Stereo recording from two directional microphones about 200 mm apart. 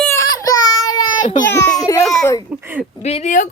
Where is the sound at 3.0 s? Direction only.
35° left (ahead or behind).